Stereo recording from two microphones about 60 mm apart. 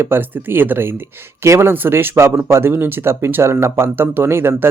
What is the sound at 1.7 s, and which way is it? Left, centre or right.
Speech, right.